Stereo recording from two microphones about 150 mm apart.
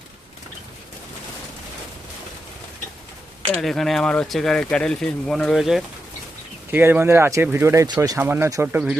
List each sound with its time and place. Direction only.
3.6 s speech: centre (ahead or behind)
6.7 s speech: 15° right (ahead or behind)